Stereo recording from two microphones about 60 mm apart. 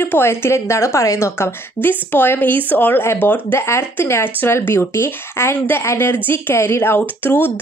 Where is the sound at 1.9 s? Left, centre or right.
Left.